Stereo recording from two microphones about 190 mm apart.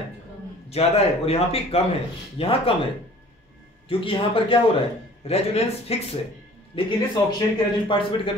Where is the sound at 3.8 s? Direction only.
30° left (ahead or behind).